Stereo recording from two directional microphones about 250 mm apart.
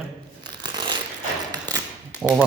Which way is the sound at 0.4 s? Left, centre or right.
Centre.